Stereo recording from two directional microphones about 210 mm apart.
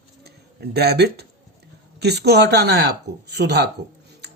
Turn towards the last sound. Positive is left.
turn(degrees=-55)  # may be behind; listen again after turning